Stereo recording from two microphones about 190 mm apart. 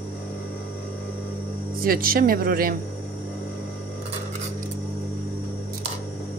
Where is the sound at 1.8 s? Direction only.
50° right (ahead or behind).